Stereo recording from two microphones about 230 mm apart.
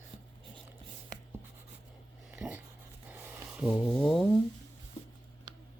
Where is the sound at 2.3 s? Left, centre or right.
Centre.